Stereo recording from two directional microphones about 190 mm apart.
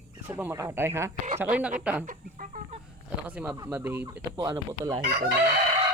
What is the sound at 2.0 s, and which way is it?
Speech, 45° right (ahead or behind).